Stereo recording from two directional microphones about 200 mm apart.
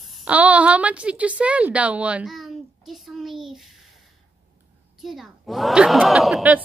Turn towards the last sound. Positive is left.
turn(degrees=-5)  # may be behind; listen again after turning